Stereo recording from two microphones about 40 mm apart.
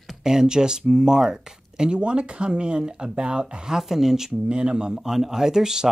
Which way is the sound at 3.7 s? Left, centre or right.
Centre.